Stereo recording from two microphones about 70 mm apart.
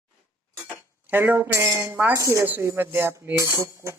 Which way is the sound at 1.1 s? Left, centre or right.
Right.